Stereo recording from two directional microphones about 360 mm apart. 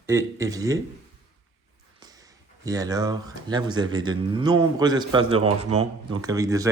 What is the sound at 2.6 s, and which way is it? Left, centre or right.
Speech, centre.